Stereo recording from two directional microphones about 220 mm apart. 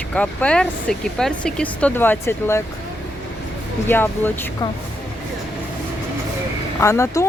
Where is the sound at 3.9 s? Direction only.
10° left (ahead or behind).